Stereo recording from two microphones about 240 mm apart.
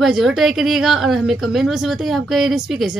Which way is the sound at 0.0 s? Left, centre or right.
Centre.